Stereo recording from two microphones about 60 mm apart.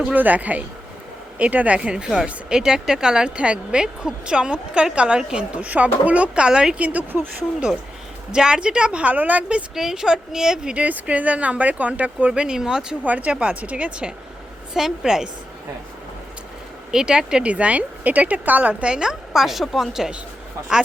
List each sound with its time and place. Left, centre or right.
0.0 s speech: right
1.8 s speech: centre
6.7 s speech: right
8.3 s speech: centre
9.7 s speech: centre
10.8 s speech: right
13.1 s speech: right
14.7 s speech: centre
16.9 s speech: centre